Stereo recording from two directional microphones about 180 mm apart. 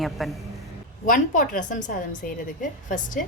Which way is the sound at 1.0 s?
45° left (ahead or behind).